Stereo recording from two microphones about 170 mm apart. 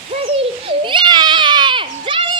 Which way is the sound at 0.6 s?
30° right (ahead or behind).